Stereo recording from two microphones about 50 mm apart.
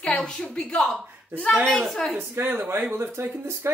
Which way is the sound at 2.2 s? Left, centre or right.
Right.